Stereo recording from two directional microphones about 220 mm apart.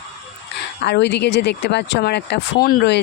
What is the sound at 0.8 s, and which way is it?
Speech, 50° left (ahead or behind).